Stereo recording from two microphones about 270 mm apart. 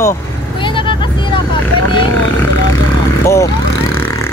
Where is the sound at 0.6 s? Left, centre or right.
Centre.